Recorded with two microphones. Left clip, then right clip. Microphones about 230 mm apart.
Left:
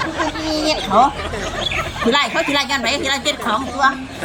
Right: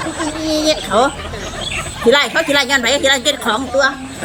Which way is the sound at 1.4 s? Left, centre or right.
Centre.